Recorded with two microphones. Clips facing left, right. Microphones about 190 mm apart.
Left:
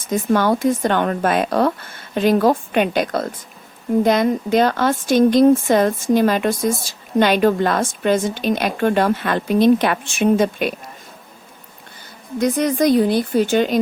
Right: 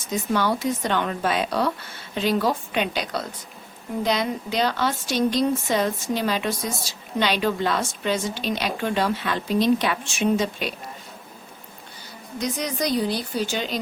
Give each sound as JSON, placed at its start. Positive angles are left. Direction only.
{"t": 0.0, "sound": "speech", "side_deg": 50}
{"t": 12.4, "sound": "speech", "side_deg": 55}